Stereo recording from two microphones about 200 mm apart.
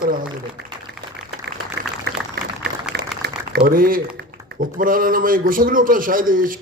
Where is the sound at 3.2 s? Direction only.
50° right (ahead or behind).